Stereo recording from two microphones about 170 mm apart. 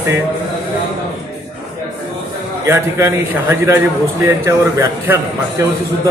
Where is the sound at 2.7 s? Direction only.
15° right (ahead or behind).